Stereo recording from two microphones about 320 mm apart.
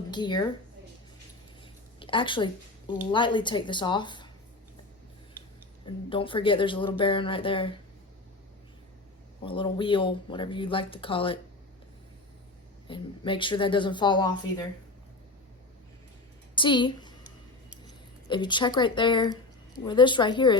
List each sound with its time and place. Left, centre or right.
0.1 s speech: centre
1.6 s speech: centre
5.8 s speech: centre
9.4 s speech: centre
12.9 s speech: centre
16.6 s a woman's voice: centre
18.3 s speech: centre